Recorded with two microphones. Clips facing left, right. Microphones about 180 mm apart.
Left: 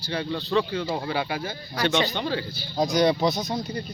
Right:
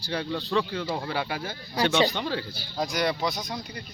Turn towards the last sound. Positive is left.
turn(degrees=25)  # may be behind; listen again after turning